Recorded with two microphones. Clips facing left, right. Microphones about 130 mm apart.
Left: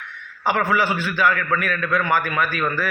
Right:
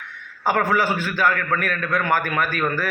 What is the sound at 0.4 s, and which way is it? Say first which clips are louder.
A man's voice: even; 45° right (ahead or behind).